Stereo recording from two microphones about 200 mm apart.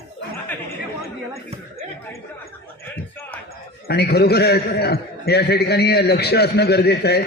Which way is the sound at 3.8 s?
55° left (ahead or behind).